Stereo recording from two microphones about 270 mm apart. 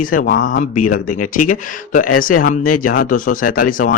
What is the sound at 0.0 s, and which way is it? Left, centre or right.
Speech, left.